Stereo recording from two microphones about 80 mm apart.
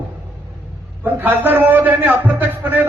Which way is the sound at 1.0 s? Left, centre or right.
Right.